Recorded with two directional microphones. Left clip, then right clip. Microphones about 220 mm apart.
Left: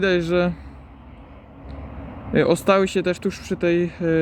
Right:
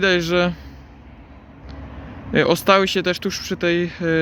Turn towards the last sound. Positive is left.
turn(degrees=10)  # may be behind; listen again after turning